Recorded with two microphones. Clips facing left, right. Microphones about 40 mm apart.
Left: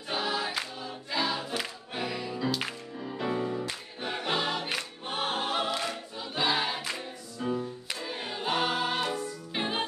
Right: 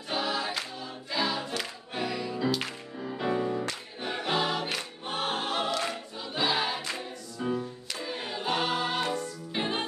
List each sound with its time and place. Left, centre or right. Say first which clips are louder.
0.1 s choir: even; centre
1.1 s music: even; centre
4.0 s choir: right 1 dB; centre
9.1 s music: right 1 dB; centre